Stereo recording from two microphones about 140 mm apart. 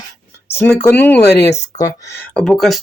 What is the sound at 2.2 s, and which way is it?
Speech, 5° left (ahead or behind).